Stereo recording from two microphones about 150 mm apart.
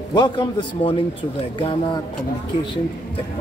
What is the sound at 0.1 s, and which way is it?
A man's voice, 30° left (ahead or behind).